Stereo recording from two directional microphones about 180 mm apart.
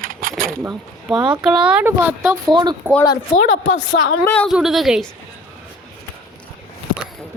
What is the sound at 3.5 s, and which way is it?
Speech, 90° left.